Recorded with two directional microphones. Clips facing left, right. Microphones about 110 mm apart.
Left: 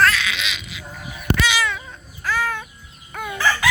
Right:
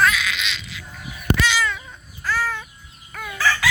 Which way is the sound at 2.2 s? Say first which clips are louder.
Left 1 dB; 15° left (ahead or behind).